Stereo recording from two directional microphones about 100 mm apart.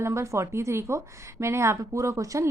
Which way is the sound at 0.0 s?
30° right (ahead or behind).